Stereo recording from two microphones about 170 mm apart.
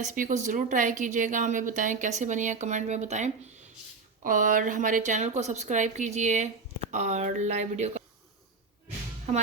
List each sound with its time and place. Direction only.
0.0 s speech: 45° right (ahead or behind)